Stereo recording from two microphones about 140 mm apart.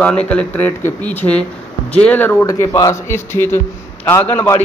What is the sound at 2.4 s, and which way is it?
A man's voice, 25° left (ahead or behind).